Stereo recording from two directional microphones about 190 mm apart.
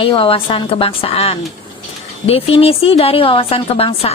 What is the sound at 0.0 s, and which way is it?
A woman's voice, 30° left (ahead or behind).